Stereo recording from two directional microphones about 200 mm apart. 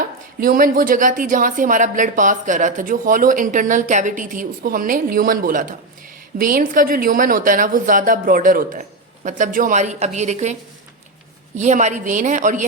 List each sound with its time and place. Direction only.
0.3 s a woman's voice: 45° right (ahead or behind)